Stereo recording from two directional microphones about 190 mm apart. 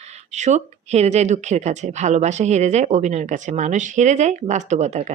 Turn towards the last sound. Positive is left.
turn(degrees=-35)  # may be behind; listen again after turning